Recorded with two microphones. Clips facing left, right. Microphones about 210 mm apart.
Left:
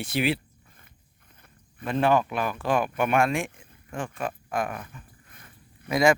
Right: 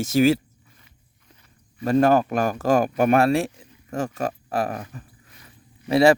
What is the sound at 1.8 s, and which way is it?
Speech, 40° right (ahead or behind).